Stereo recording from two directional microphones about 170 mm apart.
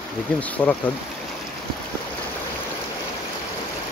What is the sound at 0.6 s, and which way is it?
Speech, 10° left (ahead or behind).